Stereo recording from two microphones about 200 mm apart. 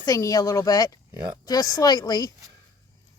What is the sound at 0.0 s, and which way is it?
A woman's voice, 15° left (ahead or behind).